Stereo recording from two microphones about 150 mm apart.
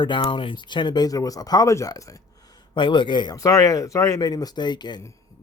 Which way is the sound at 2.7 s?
35° left (ahead or behind).